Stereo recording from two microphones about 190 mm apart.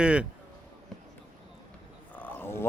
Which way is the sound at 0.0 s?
5° right (ahead or behind).